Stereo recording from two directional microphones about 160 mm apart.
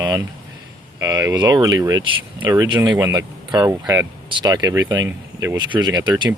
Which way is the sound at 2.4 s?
15° right (ahead or behind).